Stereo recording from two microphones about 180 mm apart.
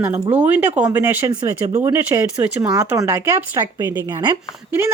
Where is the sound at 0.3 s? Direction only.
10° right (ahead or behind).